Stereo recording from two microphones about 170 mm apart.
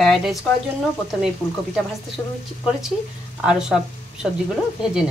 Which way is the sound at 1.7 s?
5° right (ahead or behind).